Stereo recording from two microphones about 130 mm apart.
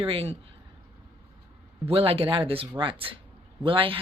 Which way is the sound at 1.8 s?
50° right (ahead or behind).